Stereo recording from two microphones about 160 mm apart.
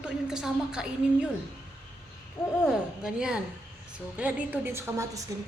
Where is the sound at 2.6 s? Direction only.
5° right (ahead or behind).